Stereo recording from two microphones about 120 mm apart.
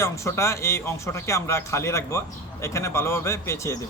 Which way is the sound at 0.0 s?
25° left (ahead or behind).